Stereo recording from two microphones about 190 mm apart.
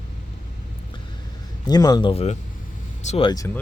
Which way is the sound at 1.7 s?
20° left (ahead or behind).